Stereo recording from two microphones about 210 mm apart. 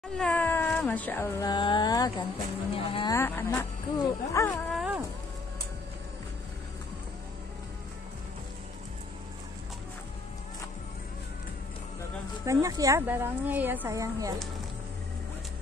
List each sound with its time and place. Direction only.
0.2 s speech: 5° left (ahead or behind); by 3.2 s 25° left (ahead or behind)
3.2 s speech: 10° left (ahead or behind)
4.7 s a sound: 5° right (ahead or behind)
12.4 s speech: 15° right (ahead or behind)